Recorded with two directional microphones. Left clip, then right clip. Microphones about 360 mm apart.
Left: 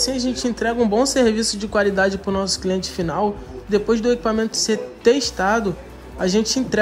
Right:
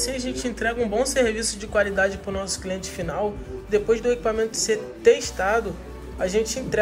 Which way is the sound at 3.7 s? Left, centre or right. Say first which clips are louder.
Left 2 dB; centre.